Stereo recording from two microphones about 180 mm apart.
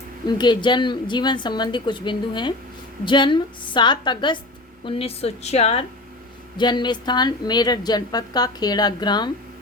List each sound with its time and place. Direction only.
0.3 s a woman's voice: 25° left (ahead or behind)
6.6 s a woman's voice: 25° left (ahead or behind)